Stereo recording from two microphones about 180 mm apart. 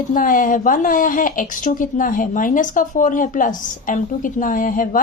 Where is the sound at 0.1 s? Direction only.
50° left (ahead or behind).